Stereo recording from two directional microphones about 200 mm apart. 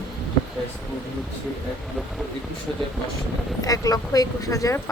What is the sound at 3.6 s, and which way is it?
Speech, 20° left (ahead or behind).